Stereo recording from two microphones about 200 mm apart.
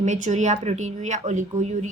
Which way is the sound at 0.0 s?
35° right (ahead or behind).